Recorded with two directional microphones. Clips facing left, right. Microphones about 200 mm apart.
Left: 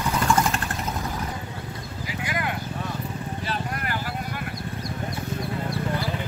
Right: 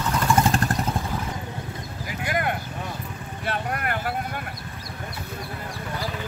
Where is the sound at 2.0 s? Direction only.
50° right (ahead or behind).